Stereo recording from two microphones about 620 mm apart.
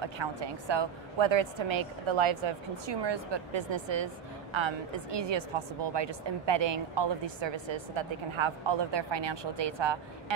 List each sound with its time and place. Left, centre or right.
0.0 s speech: right